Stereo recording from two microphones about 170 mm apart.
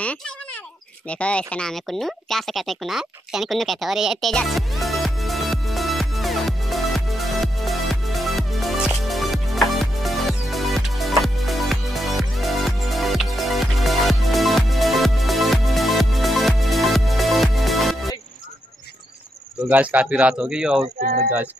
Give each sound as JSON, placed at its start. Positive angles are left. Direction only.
{"t": 1.0, "sound": "a sound", "side_deg": 5}
{"t": 19.7, "sound": "speech", "side_deg": -10}
{"t": 21.0, "sound": "speech", "side_deg": -65}